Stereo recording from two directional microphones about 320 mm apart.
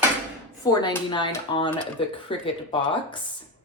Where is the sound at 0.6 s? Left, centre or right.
Centre.